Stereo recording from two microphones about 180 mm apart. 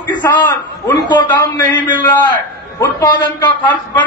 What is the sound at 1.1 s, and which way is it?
Speech, 25° left (ahead or behind).